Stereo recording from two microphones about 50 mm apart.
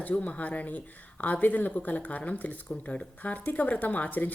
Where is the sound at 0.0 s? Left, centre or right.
Left.